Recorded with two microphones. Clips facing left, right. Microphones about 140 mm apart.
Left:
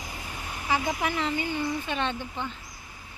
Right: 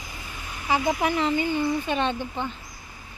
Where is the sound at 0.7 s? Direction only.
25° right (ahead or behind).